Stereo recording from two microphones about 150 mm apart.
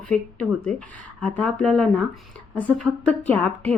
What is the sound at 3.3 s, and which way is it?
Speech, 10° left (ahead or behind).